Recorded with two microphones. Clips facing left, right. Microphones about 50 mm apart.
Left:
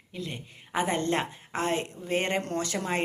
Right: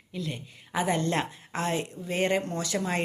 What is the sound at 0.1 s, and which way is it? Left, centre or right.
A woman's voice, left.